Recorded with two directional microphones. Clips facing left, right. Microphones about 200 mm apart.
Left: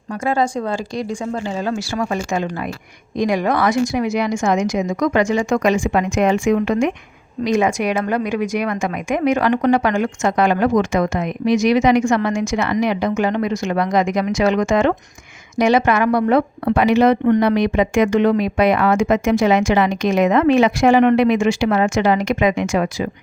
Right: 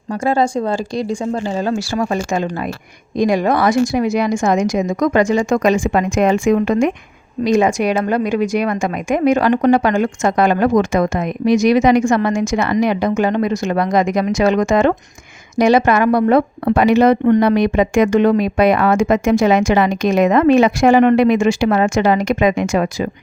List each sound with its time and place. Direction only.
0.1 s speech: 35° right (ahead or behind)